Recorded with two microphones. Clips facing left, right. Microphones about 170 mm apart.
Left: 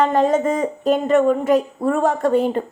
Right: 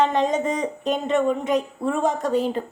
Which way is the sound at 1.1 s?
50° left (ahead or behind).